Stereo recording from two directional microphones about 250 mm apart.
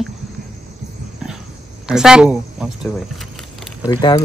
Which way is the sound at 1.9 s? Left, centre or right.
Centre.